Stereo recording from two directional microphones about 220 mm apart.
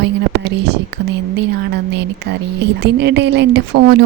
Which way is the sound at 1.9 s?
50° right (ahead or behind).